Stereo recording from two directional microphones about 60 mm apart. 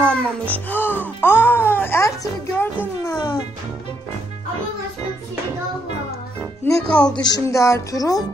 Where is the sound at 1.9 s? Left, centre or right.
Left.